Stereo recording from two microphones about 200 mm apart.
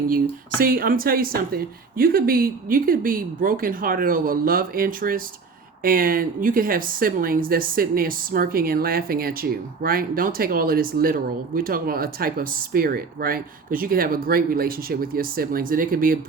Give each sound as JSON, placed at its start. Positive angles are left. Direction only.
{"t": 0.6, "sound": "speech", "side_deg": -45}